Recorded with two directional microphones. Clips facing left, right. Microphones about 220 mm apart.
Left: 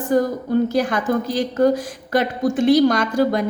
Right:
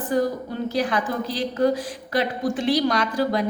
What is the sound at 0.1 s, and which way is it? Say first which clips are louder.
A woman's voice: left 6 dB; 50° left (ahead or behind).